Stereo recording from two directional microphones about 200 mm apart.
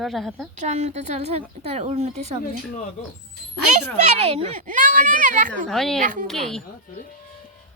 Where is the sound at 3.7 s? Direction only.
35° right (ahead or behind).